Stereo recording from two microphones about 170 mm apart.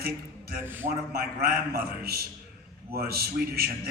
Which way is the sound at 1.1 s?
65° right (ahead or behind).